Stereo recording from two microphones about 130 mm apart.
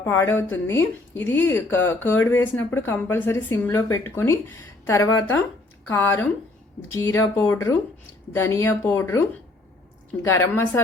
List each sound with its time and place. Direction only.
0.0 s speech: 20° left (ahead or behind)